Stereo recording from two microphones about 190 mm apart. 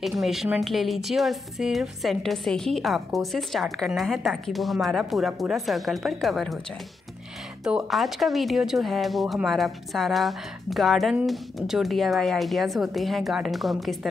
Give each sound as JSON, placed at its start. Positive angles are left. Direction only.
{"t": 0.2, "sound": "speech", "side_deg": 0}
{"t": 7.6, "sound": "speech", "side_deg": 0}